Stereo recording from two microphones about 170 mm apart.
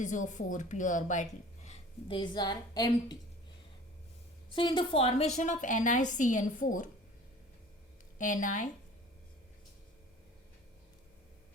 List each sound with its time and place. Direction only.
0.0 s a woman's voice: 45° left (ahead or behind); by 3.2 s 25° left (ahead or behind)
4.5 s a woman's voice: 30° left (ahead or behind); by 6.9 s 50° left (ahead or behind)
8.2 s a woman's voice: 50° left (ahead or behind)